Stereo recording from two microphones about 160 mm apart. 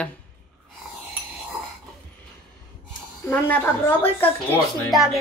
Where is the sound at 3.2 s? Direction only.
15° left (ahead or behind).